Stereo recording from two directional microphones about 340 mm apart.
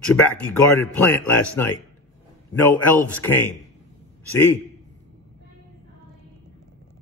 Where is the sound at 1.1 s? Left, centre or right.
Centre.